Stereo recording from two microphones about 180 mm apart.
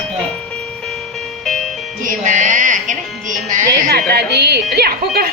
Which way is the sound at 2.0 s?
45° right (ahead or behind).